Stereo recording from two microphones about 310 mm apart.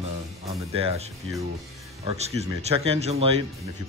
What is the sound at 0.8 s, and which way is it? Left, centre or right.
Speech, centre.